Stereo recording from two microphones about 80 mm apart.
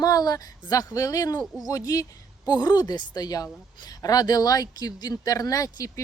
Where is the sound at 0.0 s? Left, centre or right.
Left.